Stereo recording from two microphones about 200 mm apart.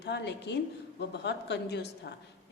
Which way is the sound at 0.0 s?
60° left (ahead or behind).